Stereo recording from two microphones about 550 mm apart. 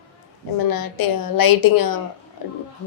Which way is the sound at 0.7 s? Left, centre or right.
Left.